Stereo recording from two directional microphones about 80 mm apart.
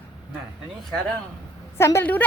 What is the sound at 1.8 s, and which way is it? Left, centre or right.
Speech, left.